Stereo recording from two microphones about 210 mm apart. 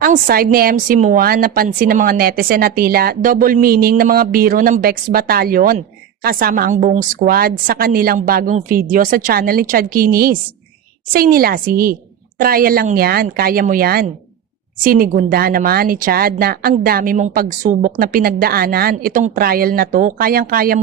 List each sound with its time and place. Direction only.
0.0 s a woman's voice: 45° right (ahead or behind)